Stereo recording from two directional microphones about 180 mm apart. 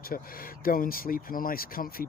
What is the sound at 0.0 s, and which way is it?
Speech, 55° left (ahead or behind).